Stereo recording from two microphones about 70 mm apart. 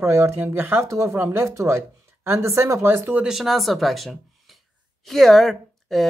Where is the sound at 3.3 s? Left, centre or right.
Centre.